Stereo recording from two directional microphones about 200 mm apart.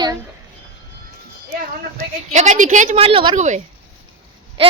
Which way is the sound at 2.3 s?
35° right (ahead or behind).